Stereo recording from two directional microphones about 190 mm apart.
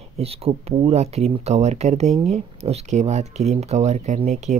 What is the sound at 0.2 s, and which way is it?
Speech, 30° right (ahead or behind).